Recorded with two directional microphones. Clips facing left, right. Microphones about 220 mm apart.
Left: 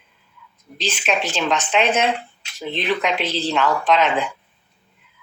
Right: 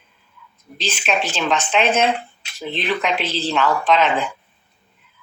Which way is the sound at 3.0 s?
15° left (ahead or behind).